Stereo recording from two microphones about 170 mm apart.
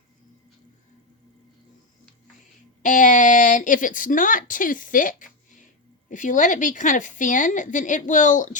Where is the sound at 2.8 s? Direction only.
45° left (ahead or behind).